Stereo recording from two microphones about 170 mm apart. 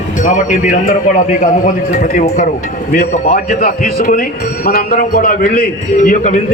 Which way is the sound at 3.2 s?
40° left (ahead or behind).